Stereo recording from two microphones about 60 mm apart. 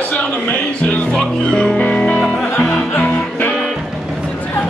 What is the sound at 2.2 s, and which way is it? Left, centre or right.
Music, centre.